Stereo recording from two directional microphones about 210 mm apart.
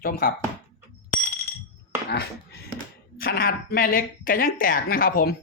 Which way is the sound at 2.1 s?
50° left (ahead or behind).